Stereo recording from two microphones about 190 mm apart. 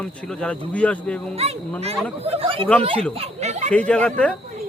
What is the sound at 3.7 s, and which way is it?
Speech, 5° left (ahead or behind).